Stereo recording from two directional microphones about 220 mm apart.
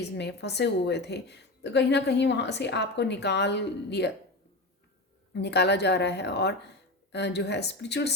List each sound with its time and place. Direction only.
0.2 s a woman's voice: 50° left (ahead or behind)
5.3 s a woman's voice: 50° left (ahead or behind)